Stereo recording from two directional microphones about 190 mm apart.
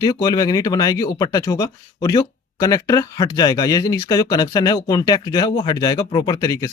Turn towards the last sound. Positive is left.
turn(degrees=15)  # may be behind; listen again after turning